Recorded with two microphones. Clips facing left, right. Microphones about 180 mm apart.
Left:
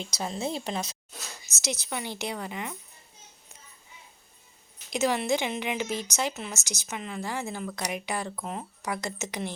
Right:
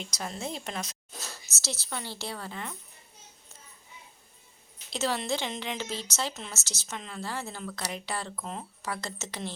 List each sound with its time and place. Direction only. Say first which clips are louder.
0.0 s a woman's voice: left 4 dB; 25° left (ahead or behind)
1.5 s a woman's voice: left 4 dB; 20° left (ahead or behind)
4.9 s a woman's voice: left 4 dB; 15° left (ahead or behind)